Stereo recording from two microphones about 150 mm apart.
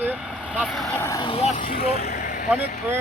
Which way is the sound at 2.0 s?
70° left (ahead or behind).